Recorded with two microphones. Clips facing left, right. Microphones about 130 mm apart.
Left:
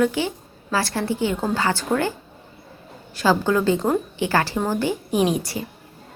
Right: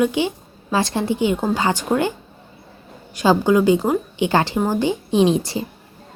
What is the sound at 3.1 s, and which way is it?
A woman's voice, 15° right (ahead or behind).